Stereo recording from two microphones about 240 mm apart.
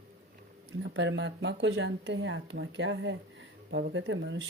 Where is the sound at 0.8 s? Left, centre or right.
Right.